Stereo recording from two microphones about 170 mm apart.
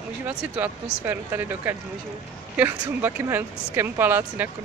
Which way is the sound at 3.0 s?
10° right (ahead or behind).